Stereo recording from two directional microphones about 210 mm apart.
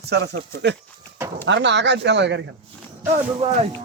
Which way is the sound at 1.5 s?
55° right (ahead or behind).